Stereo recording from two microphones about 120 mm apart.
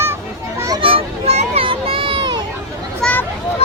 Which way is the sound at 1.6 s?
50° right (ahead or behind).